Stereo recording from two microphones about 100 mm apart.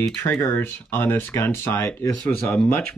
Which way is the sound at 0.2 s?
20° left (ahead or behind).